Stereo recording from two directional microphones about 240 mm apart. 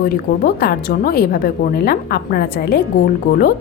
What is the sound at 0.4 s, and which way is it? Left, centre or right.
A woman's voice, left.